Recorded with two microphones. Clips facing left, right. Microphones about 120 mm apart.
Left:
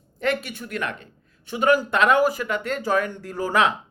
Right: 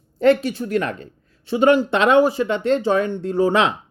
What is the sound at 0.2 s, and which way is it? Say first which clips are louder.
Speech: right 9 dB; 30° right (ahead or behind).